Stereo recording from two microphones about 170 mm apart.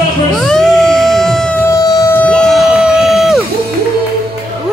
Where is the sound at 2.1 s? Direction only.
5° left (ahead or behind).